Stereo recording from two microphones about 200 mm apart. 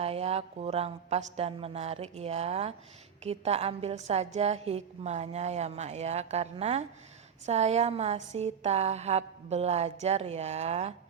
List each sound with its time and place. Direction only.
0.0 s a woman's voice: 30° right (ahead or behind)